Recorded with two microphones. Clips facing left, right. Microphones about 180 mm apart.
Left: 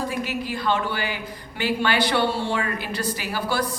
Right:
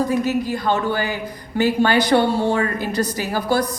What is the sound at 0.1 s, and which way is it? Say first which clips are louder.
Speech: right 8 dB; 45° right (ahead or behind).